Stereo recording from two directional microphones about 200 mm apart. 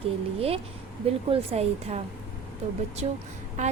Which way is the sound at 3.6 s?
35° right (ahead or behind).